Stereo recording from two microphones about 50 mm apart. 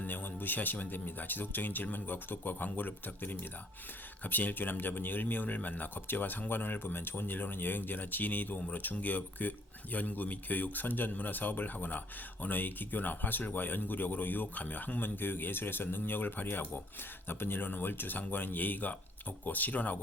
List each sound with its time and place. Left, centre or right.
0.0 s speech: left